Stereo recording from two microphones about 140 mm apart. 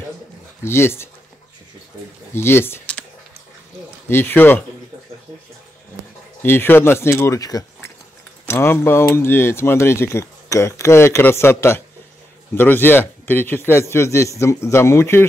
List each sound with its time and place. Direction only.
0.7 s speech: 15° left (ahead or behind)
2.3 s speech: 15° left (ahead or behind)
4.1 s speech: 15° left (ahead or behind)
6.4 s speech: 15° left (ahead or behind)